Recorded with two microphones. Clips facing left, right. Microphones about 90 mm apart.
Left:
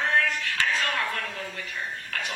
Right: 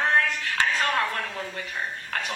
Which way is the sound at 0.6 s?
30° right (ahead or behind).